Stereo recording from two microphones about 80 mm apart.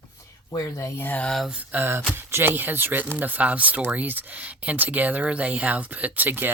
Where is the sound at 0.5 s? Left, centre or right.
Left.